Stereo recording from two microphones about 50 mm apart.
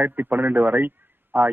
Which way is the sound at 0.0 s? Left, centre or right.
Right.